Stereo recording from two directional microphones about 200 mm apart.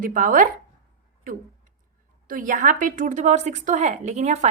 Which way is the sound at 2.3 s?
40° right (ahead or behind).